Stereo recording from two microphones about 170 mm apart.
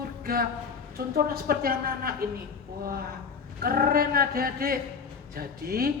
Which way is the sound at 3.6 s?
60° right (ahead or behind).